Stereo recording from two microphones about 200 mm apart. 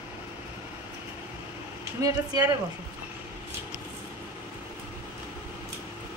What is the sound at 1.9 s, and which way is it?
Speech, 15° right (ahead or behind).